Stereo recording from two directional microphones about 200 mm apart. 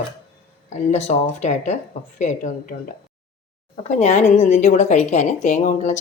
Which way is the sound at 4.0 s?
35° left (ahead or behind).